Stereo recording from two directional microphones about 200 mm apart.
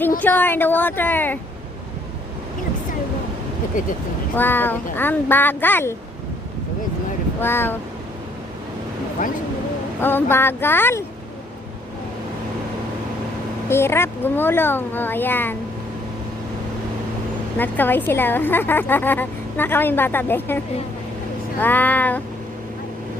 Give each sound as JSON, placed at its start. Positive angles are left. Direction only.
{"t": 0.2, "sound": "a woman's voice", "side_deg": 10}
{"t": 3.7, "sound": "speech", "side_deg": 40}
{"t": 4.4, "sound": "a woman's voice", "side_deg": 10}
{"t": 7.4, "sound": "a woman's voice", "side_deg": 10}
{"t": 9.2, "sound": "speech", "side_deg": 40}
{"t": 10.0, "sound": "a woman's voice", "side_deg": 10}
{"t": 13.7, "sound": "a woman's voice", "side_deg": 10}
{"t": 17.6, "sound": "a woman's voice", "side_deg": 10}
{"t": 21.6, "sound": "a woman's voice", "side_deg": 10}